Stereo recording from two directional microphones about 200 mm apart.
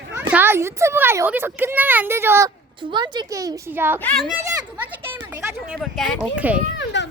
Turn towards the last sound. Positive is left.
turn(degrees=65)  # may be behind; listen again after turning